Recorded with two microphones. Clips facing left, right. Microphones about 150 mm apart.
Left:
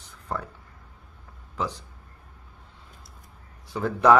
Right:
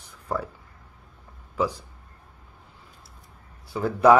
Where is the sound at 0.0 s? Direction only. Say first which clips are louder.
Right 3 dB; 10° right (ahead or behind).